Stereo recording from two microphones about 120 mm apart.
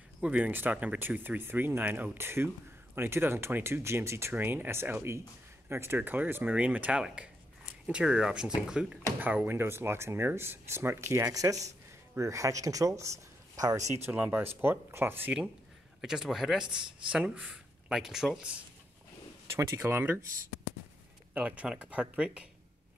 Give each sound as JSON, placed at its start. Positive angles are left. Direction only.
{"t": 0.2, "sound": "speech", "side_deg": -10}
{"t": 16.0, "sound": "speech", "side_deg": -5}
{"t": 19.5, "sound": "speech", "side_deg": -20}
{"t": 21.3, "sound": "speech", "side_deg": -10}